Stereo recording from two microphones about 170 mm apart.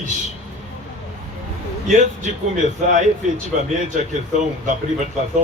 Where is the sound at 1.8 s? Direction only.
45° right (ahead or behind).